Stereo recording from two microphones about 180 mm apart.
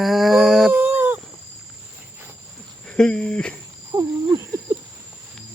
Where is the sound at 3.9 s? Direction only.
15° right (ahead or behind).